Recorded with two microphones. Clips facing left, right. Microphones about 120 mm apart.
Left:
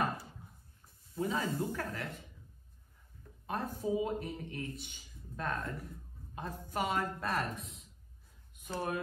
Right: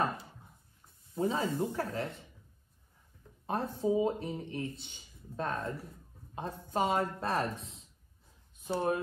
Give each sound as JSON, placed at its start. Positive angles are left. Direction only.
{"t": 1.1, "sound": "speech", "side_deg": -25}
{"t": 3.4, "sound": "speech", "side_deg": -30}